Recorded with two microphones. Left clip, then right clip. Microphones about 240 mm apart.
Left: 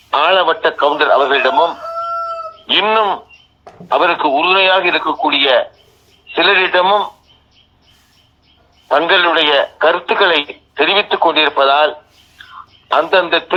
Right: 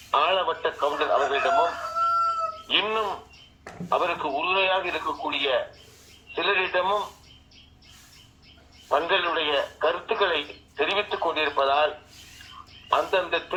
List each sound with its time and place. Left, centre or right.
0.1 s speech: left
8.9 s speech: left